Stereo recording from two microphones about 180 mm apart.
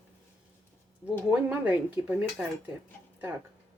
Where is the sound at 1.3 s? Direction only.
10° right (ahead or behind).